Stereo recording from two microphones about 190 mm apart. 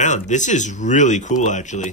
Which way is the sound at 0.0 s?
40° left (ahead or behind).